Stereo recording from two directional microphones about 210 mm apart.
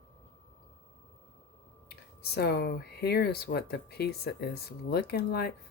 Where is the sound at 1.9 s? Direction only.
50° left (ahead or behind).